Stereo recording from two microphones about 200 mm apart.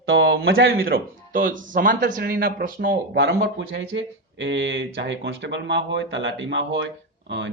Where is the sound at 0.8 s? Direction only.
45° right (ahead or behind).